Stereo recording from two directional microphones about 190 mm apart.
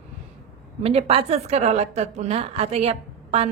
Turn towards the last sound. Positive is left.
turn(degrees=-30)  # may be behind; listen again after turning